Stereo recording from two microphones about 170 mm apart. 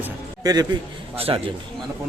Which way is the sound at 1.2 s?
35° right (ahead or behind).